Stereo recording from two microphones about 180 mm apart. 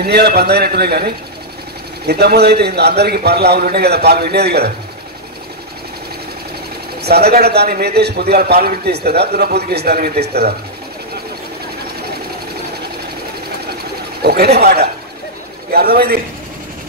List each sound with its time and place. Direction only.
0.0 s a man's voice: 60° right (ahead or behind)
7.0 s a man's voice: 65° right (ahead or behind)
14.2 s a man's voice: 60° right (ahead or behind)